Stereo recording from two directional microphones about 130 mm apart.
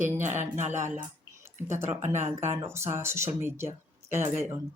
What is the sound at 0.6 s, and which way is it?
Speech, 20° right (ahead or behind).